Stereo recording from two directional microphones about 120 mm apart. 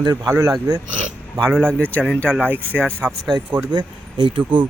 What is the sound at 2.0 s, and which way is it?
Speech, 15° right (ahead or behind).